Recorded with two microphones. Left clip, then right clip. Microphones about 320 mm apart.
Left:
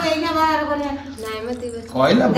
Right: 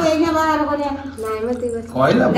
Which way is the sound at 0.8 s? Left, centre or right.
Centre.